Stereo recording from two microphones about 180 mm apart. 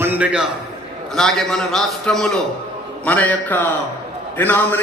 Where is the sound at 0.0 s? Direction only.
10° right (ahead or behind).